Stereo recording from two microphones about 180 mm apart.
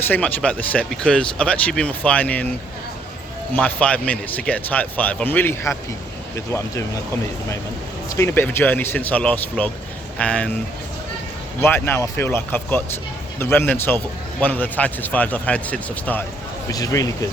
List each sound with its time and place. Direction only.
0.1 s speech: 10° left (ahead or behind)
3.5 s speech: 10° left (ahead or behind)
8.1 s speech: 15° left (ahead or behind)
11.6 s speech: 10° left (ahead or behind)
16.6 s a man's voice: 20° left (ahead or behind)